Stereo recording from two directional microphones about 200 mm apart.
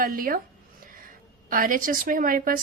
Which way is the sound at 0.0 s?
45° right (ahead or behind).